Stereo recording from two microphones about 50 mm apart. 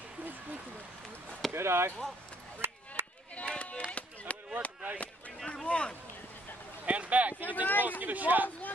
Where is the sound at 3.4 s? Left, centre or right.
Left.